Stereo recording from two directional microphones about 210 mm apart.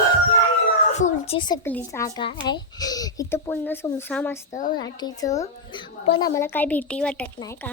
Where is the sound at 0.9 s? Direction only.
35° left (ahead or behind).